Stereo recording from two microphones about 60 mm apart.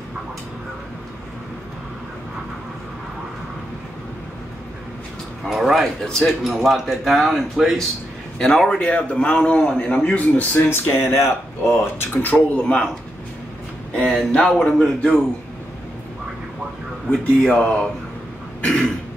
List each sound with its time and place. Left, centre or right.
5.4 s speech: centre
8.4 s a man's voice: centre
10.7 s speech: left
12.4 s a man's voice: centre
14.3 s a man's voice: centre
17.5 s a man's voice: centre
18.6 s throat clearing: centre